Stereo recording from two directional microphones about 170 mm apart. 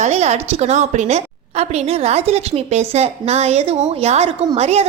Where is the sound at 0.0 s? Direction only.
40° right (ahead or behind).